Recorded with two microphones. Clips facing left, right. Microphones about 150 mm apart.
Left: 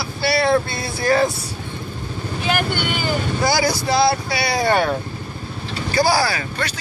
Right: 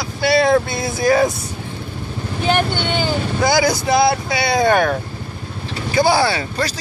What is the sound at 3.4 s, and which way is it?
Speech, 20° right (ahead or behind).